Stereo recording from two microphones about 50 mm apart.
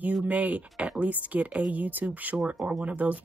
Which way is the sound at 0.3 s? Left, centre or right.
Right.